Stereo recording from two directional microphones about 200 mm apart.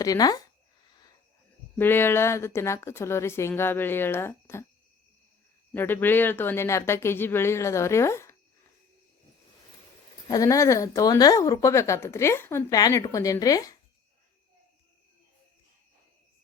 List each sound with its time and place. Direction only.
0.0 s speech: 20° left (ahead or behind)
1.8 s a woman's voice: 10° left (ahead or behind)
5.7 s a woman's voice: 10° left (ahead or behind)
10.2 s a woman's voice: 15° left (ahead or behind)